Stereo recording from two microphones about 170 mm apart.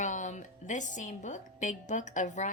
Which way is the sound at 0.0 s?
45° left (ahead or behind).